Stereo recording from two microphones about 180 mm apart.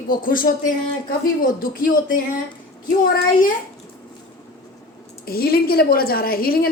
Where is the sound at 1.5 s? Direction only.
50° left (ahead or behind).